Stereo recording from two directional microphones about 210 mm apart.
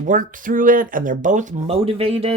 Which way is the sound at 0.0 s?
40° right (ahead or behind).